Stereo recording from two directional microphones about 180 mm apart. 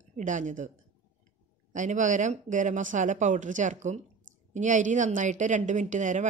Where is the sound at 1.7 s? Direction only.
45° right (ahead or behind).